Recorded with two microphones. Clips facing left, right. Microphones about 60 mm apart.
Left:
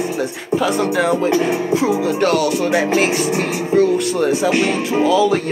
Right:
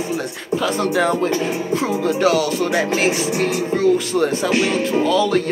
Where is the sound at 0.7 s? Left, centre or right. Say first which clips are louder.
Even; centre.